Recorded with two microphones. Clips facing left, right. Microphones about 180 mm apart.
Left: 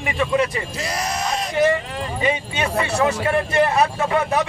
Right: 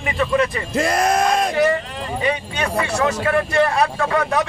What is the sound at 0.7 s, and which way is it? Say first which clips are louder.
Speech: right 8 dB; 55° right (ahead or behind).